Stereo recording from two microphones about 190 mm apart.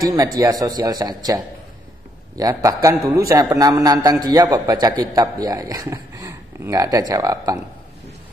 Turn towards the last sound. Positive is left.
turn(degrees=-20)  # may be behind; listen again after turning